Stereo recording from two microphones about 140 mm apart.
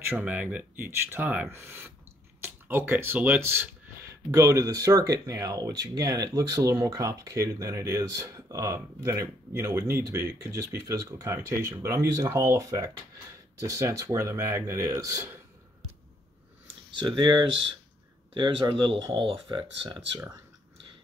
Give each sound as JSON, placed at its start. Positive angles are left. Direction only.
{"t": 0.2, "sound": "speech", "side_deg": -10}
{"t": 17.1, "sound": "speech", "side_deg": -30}